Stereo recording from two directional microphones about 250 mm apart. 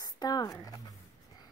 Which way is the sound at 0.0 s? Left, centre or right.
Centre.